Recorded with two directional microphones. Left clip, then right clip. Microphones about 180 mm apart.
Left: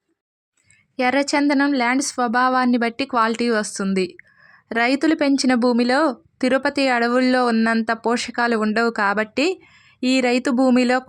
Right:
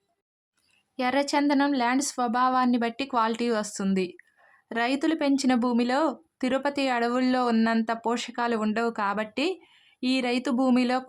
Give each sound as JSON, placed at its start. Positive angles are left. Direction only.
{"t": 0.9, "sound": "a woman's voice", "side_deg": 25}